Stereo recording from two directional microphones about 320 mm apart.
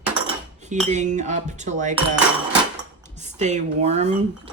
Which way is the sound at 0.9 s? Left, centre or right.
Right.